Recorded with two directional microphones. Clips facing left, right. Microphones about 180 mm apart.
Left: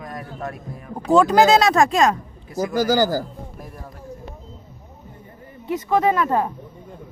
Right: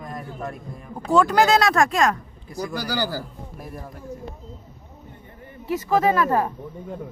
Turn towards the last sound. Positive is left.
turn(degrees=20)  # may be behind; listen again after turning